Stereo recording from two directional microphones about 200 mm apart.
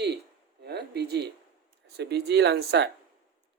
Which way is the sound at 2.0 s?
55° right (ahead or behind).